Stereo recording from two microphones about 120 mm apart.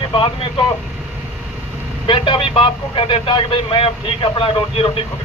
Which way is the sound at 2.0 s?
45° left (ahead or behind).